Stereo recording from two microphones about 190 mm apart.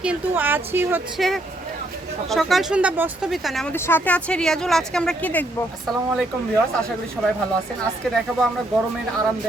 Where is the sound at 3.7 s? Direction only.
10° left (ahead or behind).